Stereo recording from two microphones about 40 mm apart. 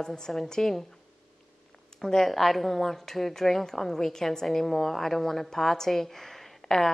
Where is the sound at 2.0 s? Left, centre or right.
Centre.